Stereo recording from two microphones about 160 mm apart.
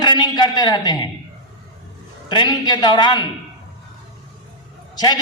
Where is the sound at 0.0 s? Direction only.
25° left (ahead or behind).